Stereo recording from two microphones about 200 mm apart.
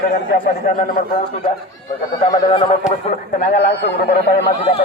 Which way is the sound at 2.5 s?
25° left (ahead or behind).